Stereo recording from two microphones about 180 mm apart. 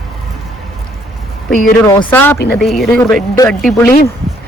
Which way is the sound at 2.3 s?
60° left (ahead or behind).